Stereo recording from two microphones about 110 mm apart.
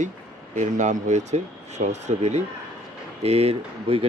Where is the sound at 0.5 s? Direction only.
90° right.